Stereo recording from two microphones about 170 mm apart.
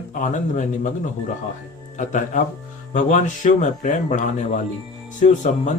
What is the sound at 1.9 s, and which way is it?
Speech, 45° left (ahead or behind).